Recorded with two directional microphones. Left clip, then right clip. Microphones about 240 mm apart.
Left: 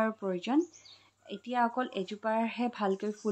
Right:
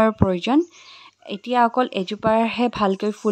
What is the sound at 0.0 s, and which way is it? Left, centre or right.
Speech, right.